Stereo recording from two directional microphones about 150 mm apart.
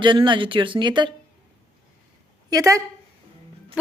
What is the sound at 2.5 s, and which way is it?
Speech, 20° right (ahead or behind).